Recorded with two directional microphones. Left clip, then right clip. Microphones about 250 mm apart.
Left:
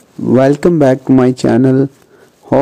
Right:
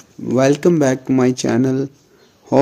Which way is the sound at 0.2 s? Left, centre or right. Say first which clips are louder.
Left 5 dB; centre.